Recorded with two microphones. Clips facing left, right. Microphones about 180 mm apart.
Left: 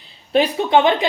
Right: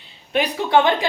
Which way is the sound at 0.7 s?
20° left (ahead or behind).